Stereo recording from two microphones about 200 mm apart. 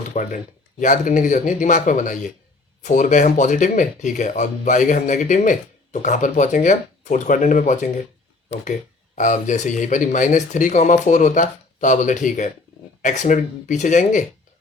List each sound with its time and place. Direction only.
0.1 s speech: 40° left (ahead or behind)
9.1 s speech: 40° left (ahead or behind)